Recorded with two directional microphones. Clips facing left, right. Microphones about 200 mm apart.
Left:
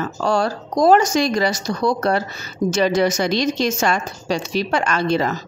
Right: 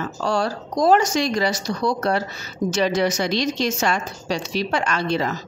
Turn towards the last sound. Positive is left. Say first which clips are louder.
# left 3 dB
turn(degrees=50)  # may be behind; listen again after turning